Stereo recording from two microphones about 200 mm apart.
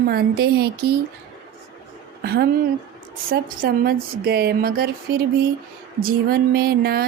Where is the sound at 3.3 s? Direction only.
50° right (ahead or behind).